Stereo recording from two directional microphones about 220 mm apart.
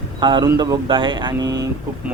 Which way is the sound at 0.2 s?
20° right (ahead or behind).